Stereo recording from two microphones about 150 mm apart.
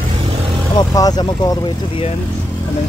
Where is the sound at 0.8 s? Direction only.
25° left (ahead or behind).